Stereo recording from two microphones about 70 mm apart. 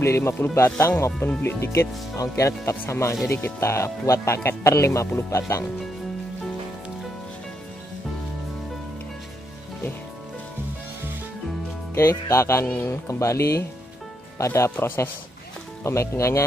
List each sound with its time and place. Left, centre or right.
0.0 s speech: left
3.3 s speech: left
11.9 s speech: left
12.6 s speech: left